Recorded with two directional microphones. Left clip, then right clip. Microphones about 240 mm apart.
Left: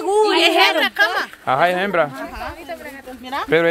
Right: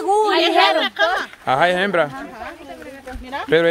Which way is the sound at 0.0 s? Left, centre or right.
Centre.